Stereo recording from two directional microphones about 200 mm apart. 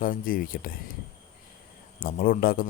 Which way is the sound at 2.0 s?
45° left (ahead or behind).